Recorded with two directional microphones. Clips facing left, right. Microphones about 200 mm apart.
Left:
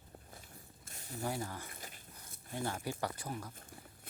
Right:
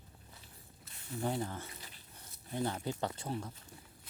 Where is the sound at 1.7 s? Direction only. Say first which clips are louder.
Left 2 dB; 50° left (ahead or behind).